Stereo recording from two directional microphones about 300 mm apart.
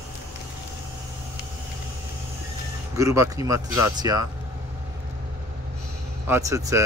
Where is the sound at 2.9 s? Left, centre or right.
Centre.